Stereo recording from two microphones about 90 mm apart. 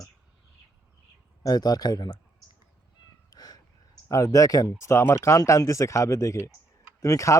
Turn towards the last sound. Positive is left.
turn(degrees=35)  # may be behind; listen again after turning